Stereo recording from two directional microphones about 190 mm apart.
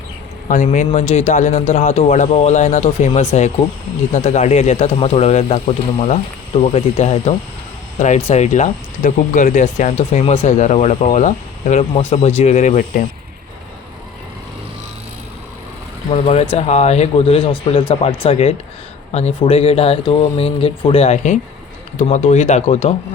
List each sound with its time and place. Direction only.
0.4 s speech: 40° left (ahead or behind)
16.1 s speech: 35° left (ahead or behind)